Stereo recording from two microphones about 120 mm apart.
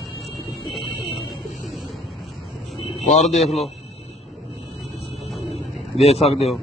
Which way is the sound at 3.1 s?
75° left (ahead or behind).